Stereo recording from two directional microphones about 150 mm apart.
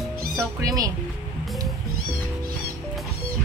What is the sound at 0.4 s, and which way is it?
Speech, 20° right (ahead or behind).